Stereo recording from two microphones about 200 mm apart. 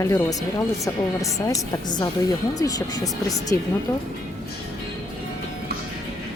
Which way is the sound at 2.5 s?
20° left (ahead or behind).